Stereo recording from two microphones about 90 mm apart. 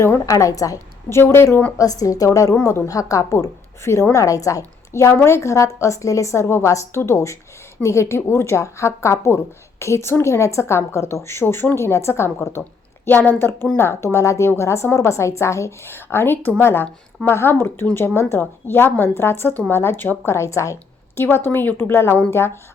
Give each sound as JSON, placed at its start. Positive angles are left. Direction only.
{"t": 0.3, "sound": "a woman's voice", "side_deg": 40}
{"t": 1.2, "sound": "speech", "side_deg": 30}
{"t": 1.8, "sound": "speech", "side_deg": 40}